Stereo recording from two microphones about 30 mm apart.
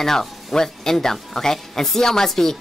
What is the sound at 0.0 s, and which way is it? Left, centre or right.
Speech, centre.